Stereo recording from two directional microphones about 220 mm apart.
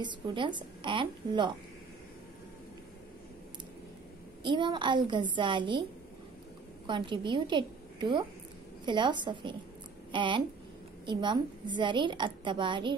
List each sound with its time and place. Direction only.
0.0 s a woman's voice: 20° right (ahead or behind)
4.4 s a woman's voice: 20° right (ahead or behind)
6.9 s a woman's voice: 20° right (ahead or behind)